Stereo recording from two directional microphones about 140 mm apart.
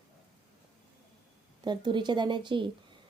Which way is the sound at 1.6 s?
30° right (ahead or behind).